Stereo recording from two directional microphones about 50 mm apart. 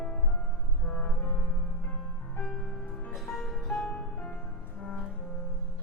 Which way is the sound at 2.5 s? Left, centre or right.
Centre.